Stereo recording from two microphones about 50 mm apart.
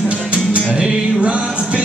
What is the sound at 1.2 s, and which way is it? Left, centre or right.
Music, right.